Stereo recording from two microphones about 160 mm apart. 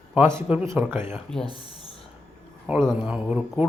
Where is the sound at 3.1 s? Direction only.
5° right (ahead or behind).